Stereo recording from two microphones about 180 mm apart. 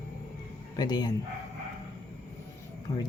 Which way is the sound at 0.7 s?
25° left (ahead or behind).